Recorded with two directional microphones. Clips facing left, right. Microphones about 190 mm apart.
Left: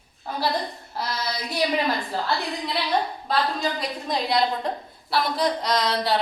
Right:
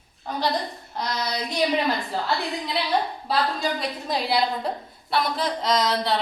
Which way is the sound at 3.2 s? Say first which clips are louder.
Even; 5° right (ahead or behind).